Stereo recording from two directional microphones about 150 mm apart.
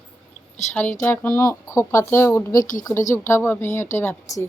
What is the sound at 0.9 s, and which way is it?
Speech, 15° left (ahead or behind).